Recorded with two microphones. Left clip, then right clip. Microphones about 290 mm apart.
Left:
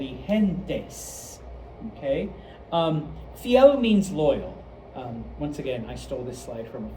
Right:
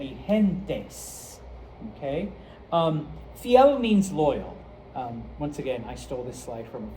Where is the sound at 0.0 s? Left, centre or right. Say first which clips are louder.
Right 1 dB; centre.